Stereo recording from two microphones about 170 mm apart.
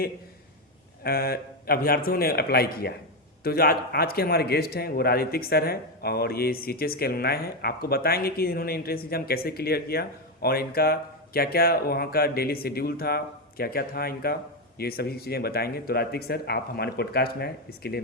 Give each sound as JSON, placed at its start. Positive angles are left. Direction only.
{"t": 1.0, "sound": "a man's voice", "side_deg": 65}